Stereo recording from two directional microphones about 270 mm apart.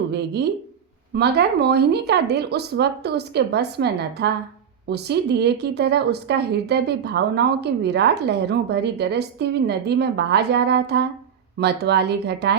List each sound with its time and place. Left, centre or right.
0.1 s speech: right